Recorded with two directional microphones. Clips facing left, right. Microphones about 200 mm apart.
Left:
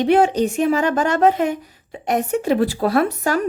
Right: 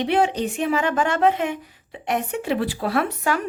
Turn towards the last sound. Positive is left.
turn(degrees=40)  # may be behind; listen again after turning